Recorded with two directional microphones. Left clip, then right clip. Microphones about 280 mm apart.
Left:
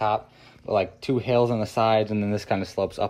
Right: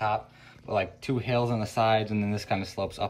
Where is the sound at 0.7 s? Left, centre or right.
Right.